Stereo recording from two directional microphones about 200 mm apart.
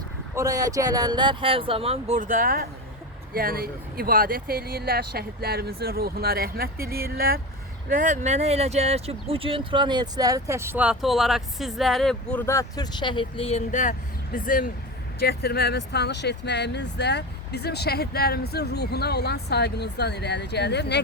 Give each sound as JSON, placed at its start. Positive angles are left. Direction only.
{"t": 0.3, "sound": "speech", "side_deg": -15}